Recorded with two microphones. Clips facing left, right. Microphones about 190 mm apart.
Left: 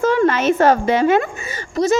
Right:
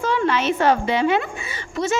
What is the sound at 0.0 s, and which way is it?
A woman's voice, 45° left (ahead or behind).